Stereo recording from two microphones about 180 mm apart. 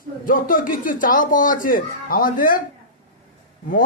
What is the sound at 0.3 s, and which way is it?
Speech, 50° left (ahead or behind).